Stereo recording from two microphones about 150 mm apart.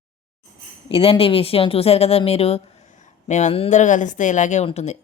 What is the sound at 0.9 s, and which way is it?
Speech, 40° left (ahead or behind).